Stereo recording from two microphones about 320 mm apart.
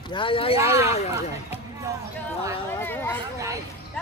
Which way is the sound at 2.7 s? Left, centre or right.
Centre.